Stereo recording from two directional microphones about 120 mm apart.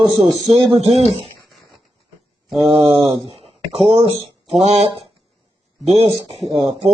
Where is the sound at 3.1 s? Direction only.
60° right (ahead or behind).